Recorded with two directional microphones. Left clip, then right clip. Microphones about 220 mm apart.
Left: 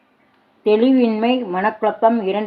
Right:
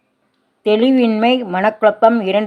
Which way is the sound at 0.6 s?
40° right (ahead or behind).